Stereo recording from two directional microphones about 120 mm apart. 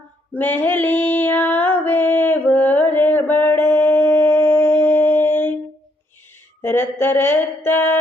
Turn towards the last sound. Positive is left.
turn(degrees=20)  # may be behind; listen again after turning